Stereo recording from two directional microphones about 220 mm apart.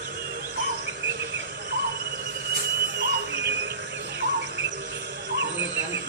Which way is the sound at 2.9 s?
50° right (ahead or behind).